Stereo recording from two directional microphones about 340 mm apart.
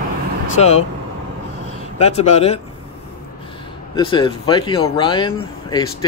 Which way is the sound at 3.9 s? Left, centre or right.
Centre.